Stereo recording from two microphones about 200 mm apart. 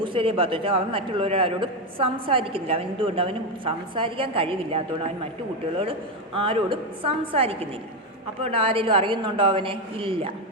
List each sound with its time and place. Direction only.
0.0 s a man's voice: 25° right (ahead or behind)